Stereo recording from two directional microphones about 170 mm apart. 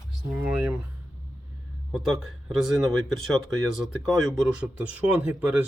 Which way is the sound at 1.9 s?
Centre (ahead or behind).